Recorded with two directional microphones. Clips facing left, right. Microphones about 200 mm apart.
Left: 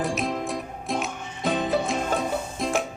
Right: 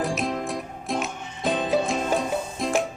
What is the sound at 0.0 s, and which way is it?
Music, centre (ahead or behind).